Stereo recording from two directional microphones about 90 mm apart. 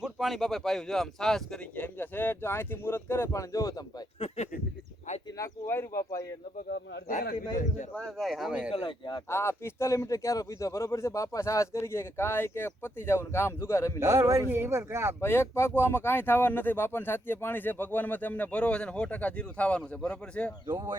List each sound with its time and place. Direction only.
0.0 s speech: 5° right (ahead or behind); by 3.8 s 40° left (ahead or behind)
4.2 s speech: 90° left
5.4 s speech: 30° left (ahead or behind)
7.9 s speech: centre (ahead or behind)
8.7 s speech: 90° left
9.3 s speech: 30° left (ahead or behind)
14.0 s speech: 35° right (ahead or behind)
15.2 s speech: 25° left (ahead or behind); by 20.5 s 10° left (ahead or behind)